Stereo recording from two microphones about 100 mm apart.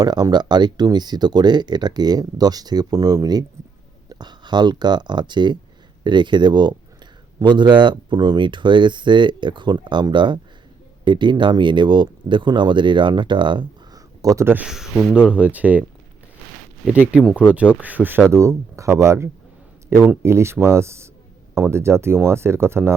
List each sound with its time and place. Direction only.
0.0 s speech: 45° right (ahead or behind)
13.9 s a sound: 35° right (ahead or behind)
14.4 s speech: 15° right (ahead or behind)
14.7 s speech: 5° right (ahead or behind)
17.8 s speech: 15° right (ahead or behind)
18.3 s speech: 30° right (ahead or behind)